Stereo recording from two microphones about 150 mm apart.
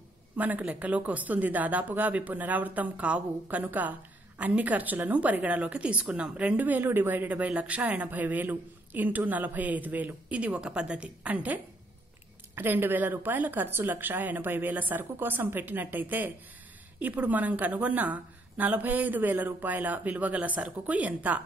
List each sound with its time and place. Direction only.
0.4 s speech: 10° right (ahead or behind)